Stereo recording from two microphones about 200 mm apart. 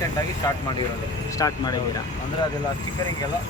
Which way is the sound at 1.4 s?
20° left (ahead or behind).